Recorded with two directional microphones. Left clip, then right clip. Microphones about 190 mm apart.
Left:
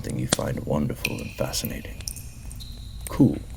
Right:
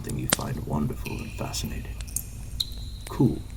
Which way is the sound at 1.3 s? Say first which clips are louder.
Left 5 dB; 35° left (ahead or behind).